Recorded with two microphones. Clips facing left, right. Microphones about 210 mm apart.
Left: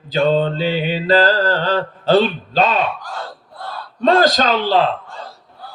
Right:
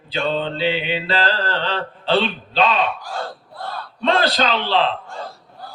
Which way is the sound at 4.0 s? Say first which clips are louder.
Left 5 dB; 45° left (ahead or behind).